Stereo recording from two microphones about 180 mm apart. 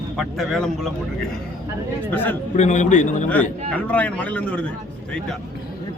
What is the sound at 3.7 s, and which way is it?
Speech, 10° left (ahead or behind).